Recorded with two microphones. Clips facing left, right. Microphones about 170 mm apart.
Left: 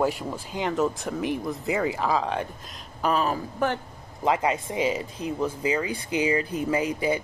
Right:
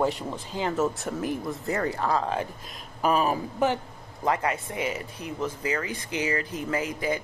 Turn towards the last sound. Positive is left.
turn(degrees=15)  # may be behind; listen again after turning